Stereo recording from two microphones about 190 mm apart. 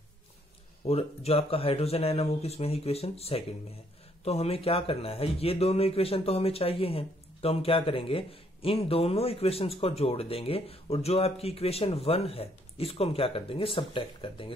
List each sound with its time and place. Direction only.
0.8 s speech: 30° left (ahead or behind)